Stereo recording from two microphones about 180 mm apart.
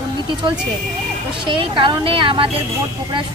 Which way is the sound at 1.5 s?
25° right (ahead or behind).